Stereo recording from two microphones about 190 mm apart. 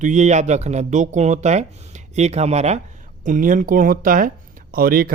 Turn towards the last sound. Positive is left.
turn(degrees=-50)  # may be behind; listen again after turning